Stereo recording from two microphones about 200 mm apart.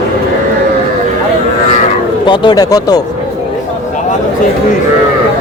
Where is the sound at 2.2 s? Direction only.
25° left (ahead or behind).